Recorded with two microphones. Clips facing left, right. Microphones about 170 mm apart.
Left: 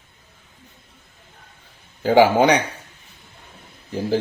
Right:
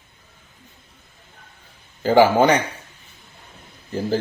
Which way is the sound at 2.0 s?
15° left (ahead or behind).